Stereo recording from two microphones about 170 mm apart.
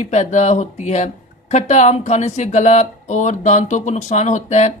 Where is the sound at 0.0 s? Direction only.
45° left (ahead or behind).